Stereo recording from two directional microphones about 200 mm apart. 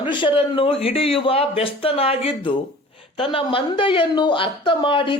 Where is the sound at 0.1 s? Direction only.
25° left (ahead or behind).